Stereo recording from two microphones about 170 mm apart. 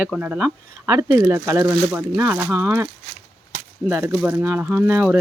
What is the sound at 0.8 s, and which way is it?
Speech, 20° right (ahead or behind).